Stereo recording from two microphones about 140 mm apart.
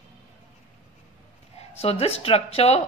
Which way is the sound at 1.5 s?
45° left (ahead or behind).